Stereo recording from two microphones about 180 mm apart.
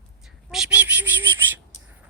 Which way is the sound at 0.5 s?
5° right (ahead or behind).